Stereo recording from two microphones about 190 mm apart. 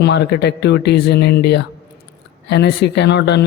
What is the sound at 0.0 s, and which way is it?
Speech, 60° left (ahead or behind).